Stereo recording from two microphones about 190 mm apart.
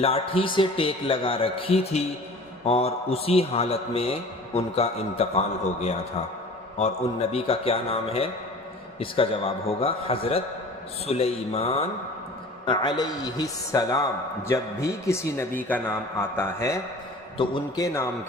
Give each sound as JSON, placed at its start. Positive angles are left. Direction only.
{"t": 0.0, "sound": "a woman's voice", "side_deg": 30}
{"t": 6.7, "sound": "a man's voice", "side_deg": 35}
{"t": 17.3, "sound": "a woman's voice", "side_deg": 25}